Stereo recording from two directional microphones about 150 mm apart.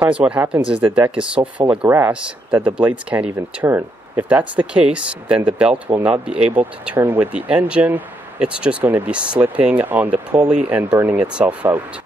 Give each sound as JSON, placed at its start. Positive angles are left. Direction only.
{"t": 0.0, "sound": "speech", "side_deg": -10}
{"t": 5.9, "sound": "speech", "side_deg": -20}
{"t": 6.2, "sound": "speech", "side_deg": -5}